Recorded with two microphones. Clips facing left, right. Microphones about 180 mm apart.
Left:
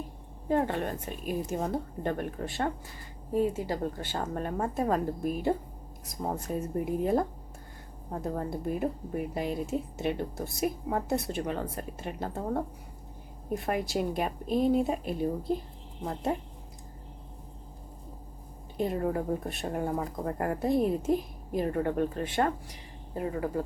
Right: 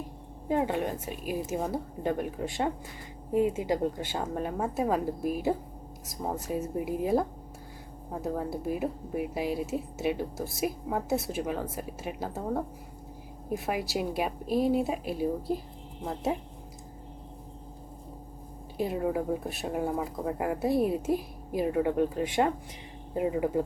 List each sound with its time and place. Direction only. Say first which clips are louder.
0.4 s a woman's voice: even; 10° right (ahead or behind)
18.8 s a woman's voice: even; 5° right (ahead or behind)